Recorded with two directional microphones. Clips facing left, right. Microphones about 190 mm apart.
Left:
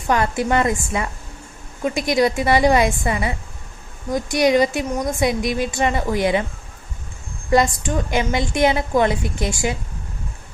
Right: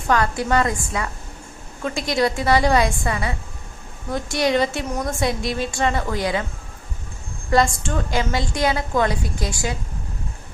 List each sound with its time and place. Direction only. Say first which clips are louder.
0.1 s a woman's voice: left 1 dB; 20° left (ahead or behind)
7.5 s a woman's voice: left 2 dB; 20° left (ahead or behind)